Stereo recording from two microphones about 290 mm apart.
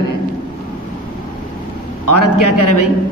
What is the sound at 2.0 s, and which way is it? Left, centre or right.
Speech, left.